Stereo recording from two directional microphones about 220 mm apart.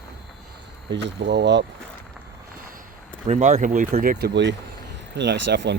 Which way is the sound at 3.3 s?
30° right (ahead or behind).